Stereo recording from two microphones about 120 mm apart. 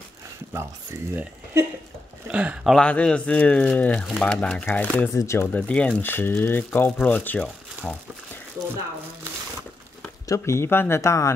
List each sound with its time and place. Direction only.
1.1 s speech: 20° right (ahead or behind)
2.3 s speech: 10° right (ahead or behind)
2.7 s speech: 10° left (ahead or behind)
5.1 s speech: 25° left (ahead or behind)
5.5 s speech: 10° left (ahead or behind)
10.2 s speech: 25° left (ahead or behind)